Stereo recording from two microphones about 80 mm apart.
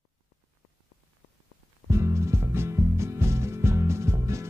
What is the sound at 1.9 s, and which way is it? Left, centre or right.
Music, right.